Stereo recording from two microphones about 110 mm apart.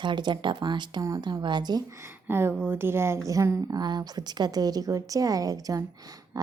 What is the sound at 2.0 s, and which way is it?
A woman's voice, 20° right (ahead or behind).